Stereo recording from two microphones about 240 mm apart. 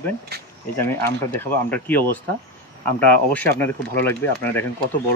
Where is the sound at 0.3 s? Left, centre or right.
Right.